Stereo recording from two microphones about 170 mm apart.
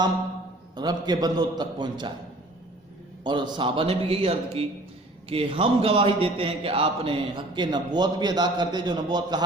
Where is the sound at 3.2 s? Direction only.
25° right (ahead or behind).